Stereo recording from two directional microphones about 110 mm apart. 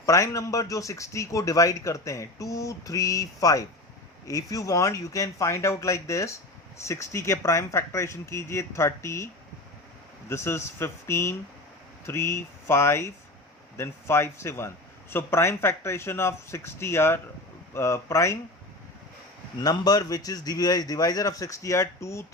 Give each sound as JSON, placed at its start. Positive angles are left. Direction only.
{"t": 0.0, "sound": "a man's voice", "side_deg": 30}
{"t": 19.6, "sound": "a man's voice", "side_deg": 35}